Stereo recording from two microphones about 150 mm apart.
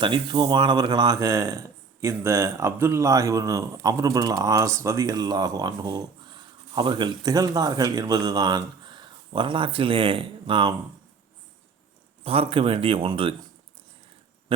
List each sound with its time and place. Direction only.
0.0 s speech: 30° right (ahead or behind)
12.2 s speech: 40° right (ahead or behind)